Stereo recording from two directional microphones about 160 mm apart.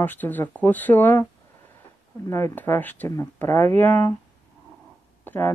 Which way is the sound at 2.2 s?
15° left (ahead or behind).